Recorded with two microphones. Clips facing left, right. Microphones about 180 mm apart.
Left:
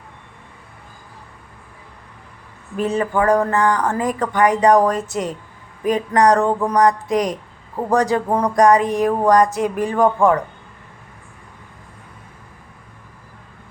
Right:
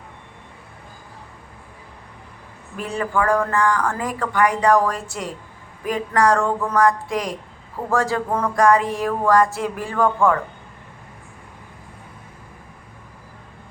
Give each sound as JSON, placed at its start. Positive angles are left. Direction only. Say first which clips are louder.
{"t": 2.7, "sound": "speech", "louder": "left 4 dB", "side_deg": 20}